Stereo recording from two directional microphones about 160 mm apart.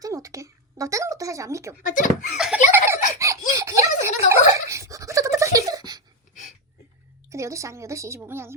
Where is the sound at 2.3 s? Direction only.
5° right (ahead or behind).